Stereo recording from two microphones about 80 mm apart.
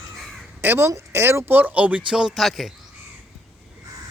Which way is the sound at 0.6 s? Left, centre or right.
Right.